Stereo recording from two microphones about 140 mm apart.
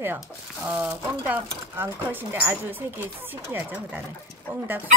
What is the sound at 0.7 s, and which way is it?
Speech, 10° right (ahead or behind).